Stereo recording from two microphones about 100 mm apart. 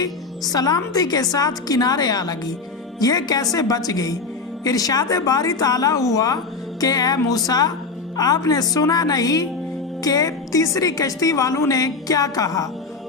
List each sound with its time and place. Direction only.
0.0 s a woman's voice: 40° left (ahead or behind)